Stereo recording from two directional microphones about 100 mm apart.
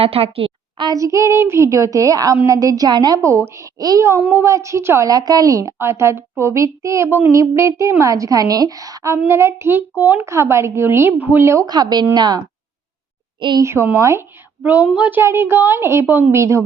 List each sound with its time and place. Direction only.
0.0 s a woman's voice: 75° right (ahead or behind)
0.9 s a woman's voice: 30° right (ahead or behind)
3.2 s a woman's voice: 30° right (ahead or behind)
4.2 s a woman's voice: 20° right (ahead or behind)
5.0 s a woman's voice: 40° right (ahead or behind)
9.1 s a woman's voice: 25° right (ahead or behind)
11.6 s a woman's voice: 45° right (ahead or behind)
13.6 s a woman's voice: 25° right (ahead or behind)
14.6 s a woman's voice: 15° right (ahead or behind)
15.2 s a woman's voice: 25° right (ahead or behind)